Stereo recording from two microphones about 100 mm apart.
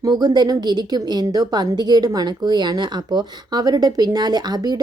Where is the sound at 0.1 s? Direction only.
45° right (ahead or behind).